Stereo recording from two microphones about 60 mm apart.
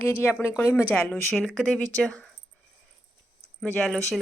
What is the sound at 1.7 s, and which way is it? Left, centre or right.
Speech, centre.